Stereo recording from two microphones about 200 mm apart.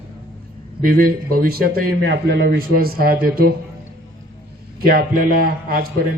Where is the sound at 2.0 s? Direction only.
60° right (ahead or behind).